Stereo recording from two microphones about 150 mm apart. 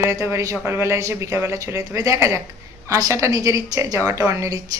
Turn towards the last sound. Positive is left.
turn(degrees=-20)  # may be behind; listen again after turning